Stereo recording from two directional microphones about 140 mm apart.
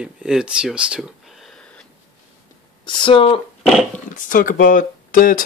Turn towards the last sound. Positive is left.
turn(degrees=80)